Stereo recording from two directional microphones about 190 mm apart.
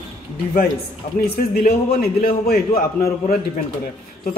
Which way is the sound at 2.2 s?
50° left (ahead or behind).